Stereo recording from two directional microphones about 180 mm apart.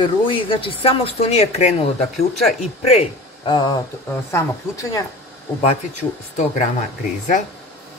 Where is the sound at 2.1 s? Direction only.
Centre (ahead or behind).